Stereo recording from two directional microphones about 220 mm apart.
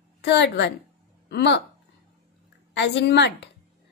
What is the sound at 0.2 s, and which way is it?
A woman's voice, 50° left (ahead or behind).